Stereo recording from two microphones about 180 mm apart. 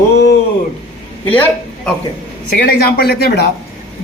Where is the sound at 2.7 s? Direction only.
55° left (ahead or behind).